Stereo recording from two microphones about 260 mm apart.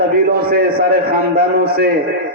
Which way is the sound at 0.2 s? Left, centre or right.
Right.